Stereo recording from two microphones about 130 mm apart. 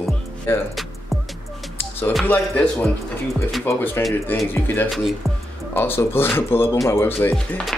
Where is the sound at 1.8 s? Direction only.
15° left (ahead or behind).